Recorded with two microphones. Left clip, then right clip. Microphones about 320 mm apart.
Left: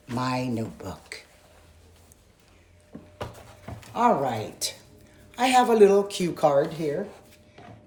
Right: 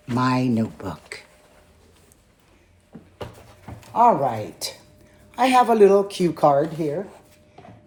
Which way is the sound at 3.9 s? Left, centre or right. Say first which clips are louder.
Right 5 dB; centre.